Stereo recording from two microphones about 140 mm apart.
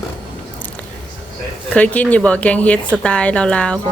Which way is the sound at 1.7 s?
10° left (ahead or behind).